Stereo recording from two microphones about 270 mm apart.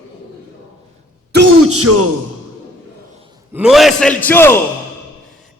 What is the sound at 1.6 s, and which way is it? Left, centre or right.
Speech, right.